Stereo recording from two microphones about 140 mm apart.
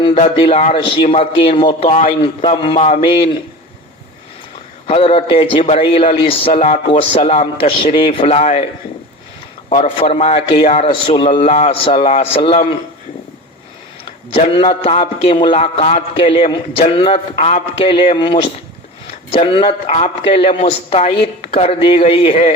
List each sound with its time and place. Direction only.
0.0 s a man's voice: 40° left (ahead or behind)
2.8 s a man's voice: 50° left (ahead or behind)
4.9 s a man's voice: 45° left (ahead or behind)
9.6 s a man's voice: 40° left (ahead or behind)
11.4 s a man's voice: 50° left (ahead or behind)
11.9 s a man's voice: 40° left (ahead or behind)
14.3 s a man's voice: 40° left (ahead or behind)
17.3 s a man's voice: 55° left (ahead or behind)